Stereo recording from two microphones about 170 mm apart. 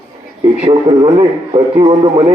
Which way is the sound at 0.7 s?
25° right (ahead or behind).